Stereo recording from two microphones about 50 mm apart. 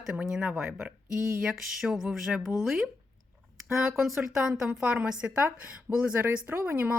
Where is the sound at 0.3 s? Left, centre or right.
Centre.